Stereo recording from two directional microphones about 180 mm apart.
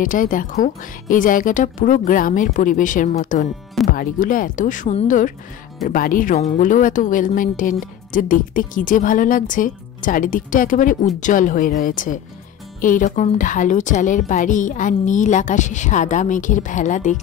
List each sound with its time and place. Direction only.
0.0 s a woman's voice: 50° left (ahead or behind)